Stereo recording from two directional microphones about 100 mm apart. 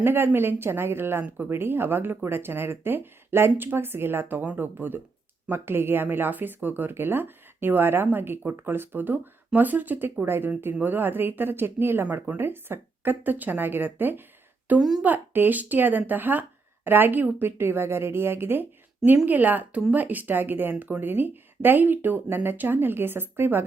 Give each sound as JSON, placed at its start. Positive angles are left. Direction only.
{"t": 0.0, "sound": "speech", "side_deg": -20}
{"t": 12.0, "sound": "speech", "side_deg": -10}
{"t": 14.8, "sound": "speech", "side_deg": -5}
{"t": 15.0, "sound": "speech", "side_deg": -20}